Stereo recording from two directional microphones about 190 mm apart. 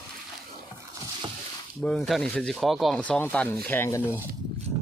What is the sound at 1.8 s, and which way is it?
Speech, 5° left (ahead or behind).